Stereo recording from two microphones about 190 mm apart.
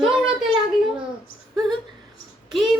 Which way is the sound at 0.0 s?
5° right (ahead or behind).